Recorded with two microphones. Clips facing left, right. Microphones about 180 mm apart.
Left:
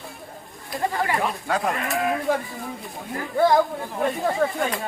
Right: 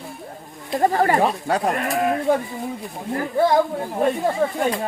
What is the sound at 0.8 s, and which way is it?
Speech, 45° right (ahead or behind).